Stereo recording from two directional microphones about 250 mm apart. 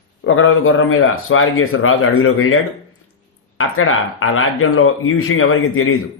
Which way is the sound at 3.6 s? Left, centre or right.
Left.